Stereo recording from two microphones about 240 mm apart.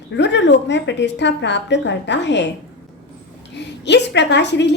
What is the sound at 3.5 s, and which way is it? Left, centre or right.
A woman's voice, left.